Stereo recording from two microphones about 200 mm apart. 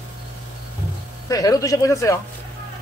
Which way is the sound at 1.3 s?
15° left (ahead or behind).